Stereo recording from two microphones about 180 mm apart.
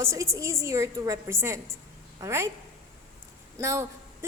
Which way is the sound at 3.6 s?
15° right (ahead or behind).